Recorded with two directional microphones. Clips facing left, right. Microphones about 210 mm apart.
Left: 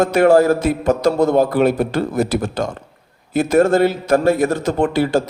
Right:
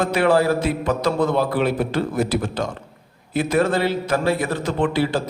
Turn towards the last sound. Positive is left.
turn(degrees=45)  # may be behind; listen again after turning